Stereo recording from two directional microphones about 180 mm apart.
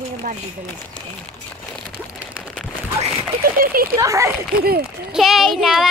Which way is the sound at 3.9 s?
15° right (ahead or behind).